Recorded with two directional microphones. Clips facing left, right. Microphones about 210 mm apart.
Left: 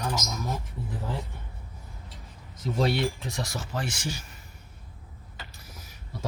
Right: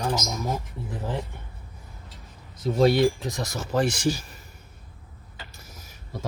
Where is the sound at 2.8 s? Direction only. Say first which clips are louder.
Right 7 dB; 40° right (ahead or behind).